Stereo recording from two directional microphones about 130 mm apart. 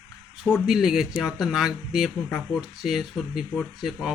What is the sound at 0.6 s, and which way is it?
Speech, 5° right (ahead or behind).